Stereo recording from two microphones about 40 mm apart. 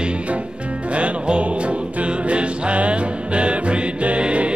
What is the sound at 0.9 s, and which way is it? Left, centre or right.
Music, right.